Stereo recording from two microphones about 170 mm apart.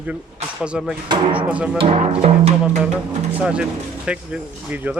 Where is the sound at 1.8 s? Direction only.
35° right (ahead or behind).